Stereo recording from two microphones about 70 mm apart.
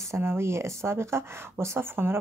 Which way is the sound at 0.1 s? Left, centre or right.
Right.